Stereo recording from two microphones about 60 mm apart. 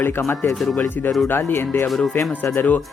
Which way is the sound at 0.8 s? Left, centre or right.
Left.